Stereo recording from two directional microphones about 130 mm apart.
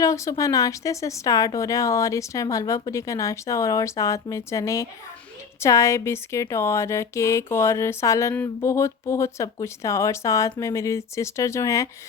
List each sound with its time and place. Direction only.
0.0 s speech: 25° left (ahead or behind)